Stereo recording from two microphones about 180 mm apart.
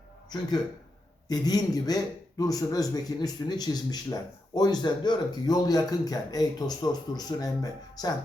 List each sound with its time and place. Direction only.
1.3 s speech: 20° left (ahead or behind)